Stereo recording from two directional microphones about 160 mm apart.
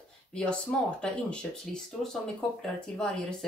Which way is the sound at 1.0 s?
5° left (ahead or behind).